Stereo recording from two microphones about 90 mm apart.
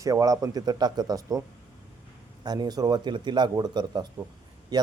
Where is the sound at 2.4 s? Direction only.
50° right (ahead or behind).